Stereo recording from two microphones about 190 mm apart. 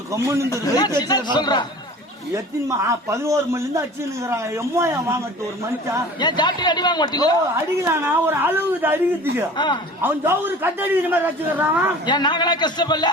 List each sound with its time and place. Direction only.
0.1 s a man's voice: 15° right (ahead or behind)
0.5 s a man's voice: 20° left (ahead or behind)
2.3 s a man's voice: 15° right (ahead or behind)
6.1 s a man's voice: 25° left (ahead or behind)
8.0 s a man's voice: 10° right (ahead or behind)
9.6 s a man's voice: 25° left (ahead or behind)
10.0 s a man's voice: 10° right (ahead or behind)
12.0 s a man's voice: 25° left (ahead or behind)